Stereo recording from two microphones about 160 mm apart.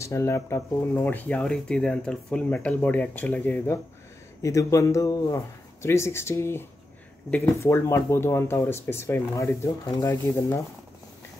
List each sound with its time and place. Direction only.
0.0 s speech: 15° left (ahead or behind)